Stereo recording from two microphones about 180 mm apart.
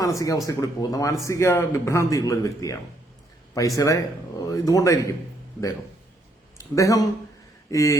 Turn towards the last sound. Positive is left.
turn(degrees=15)  # may be behind; listen again after turning